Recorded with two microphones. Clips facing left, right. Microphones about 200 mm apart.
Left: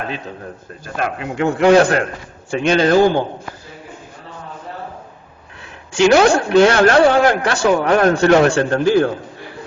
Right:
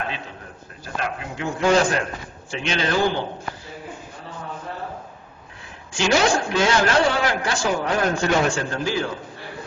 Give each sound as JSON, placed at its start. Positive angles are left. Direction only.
{"t": 1.2, "sound": "a man's voice", "side_deg": 70}
{"t": 5.9, "sound": "speech", "side_deg": 60}